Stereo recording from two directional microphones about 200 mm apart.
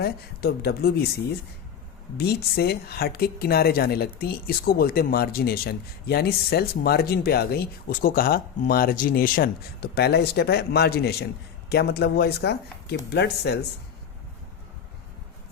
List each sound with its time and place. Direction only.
0.0 s speech: 50° left (ahead or behind)
2.1 s speech: 55° left (ahead or behind)